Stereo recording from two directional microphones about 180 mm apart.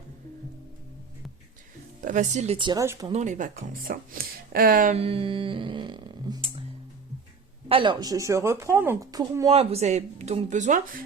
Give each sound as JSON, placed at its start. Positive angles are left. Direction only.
{"t": 2.0, "sound": "speech", "side_deg": -45}
{"t": 2.6, "sound": "speech", "side_deg": -25}
{"t": 2.8, "sound": "speech", "side_deg": -15}
{"t": 3.1, "sound": "speech", "side_deg": -40}
{"t": 4.9, "sound": "speech", "side_deg": -30}
{"t": 7.7, "sound": "speech", "side_deg": -25}
{"t": 9.5, "sound": "speech", "side_deg": -35}